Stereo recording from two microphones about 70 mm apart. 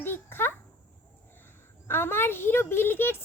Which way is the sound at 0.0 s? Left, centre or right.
Left.